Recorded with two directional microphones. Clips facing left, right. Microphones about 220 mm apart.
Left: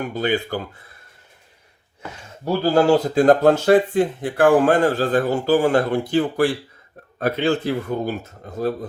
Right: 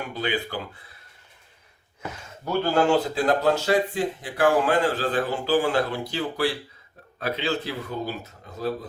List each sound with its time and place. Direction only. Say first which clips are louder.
0.1 s speech: left 4 dB; 45° left (ahead or behind)
2.4 s speech: left 5 dB; 35° left (ahead or behind)